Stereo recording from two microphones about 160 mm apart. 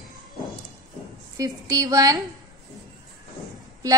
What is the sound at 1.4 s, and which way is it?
Speech, 20° right (ahead or behind).